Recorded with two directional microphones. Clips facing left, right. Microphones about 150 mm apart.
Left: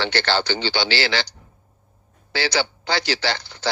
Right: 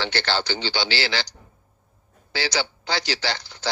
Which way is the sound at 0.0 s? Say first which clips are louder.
Left 3 dB; 65° left (ahead or behind).